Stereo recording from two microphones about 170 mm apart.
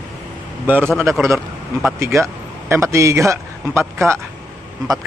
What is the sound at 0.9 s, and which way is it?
Speech, centre (ahead or behind).